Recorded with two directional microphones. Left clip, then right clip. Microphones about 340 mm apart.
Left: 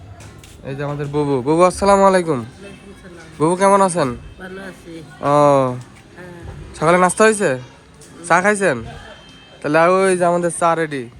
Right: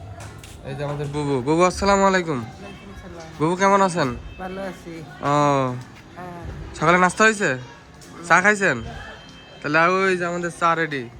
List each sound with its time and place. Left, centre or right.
0.7 s a man's voice: centre
6.7 s a man's voice: centre